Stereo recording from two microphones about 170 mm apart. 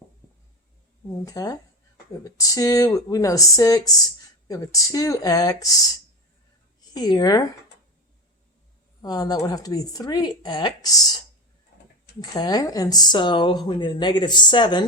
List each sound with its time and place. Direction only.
1.2 s a woman's voice: 20° left (ahead or behind)
6.9 s a woman's voice: 25° left (ahead or behind)
9.0 s a woman's voice: 20° left (ahead or behind)
12.3 s a woman's voice: 25° left (ahead or behind)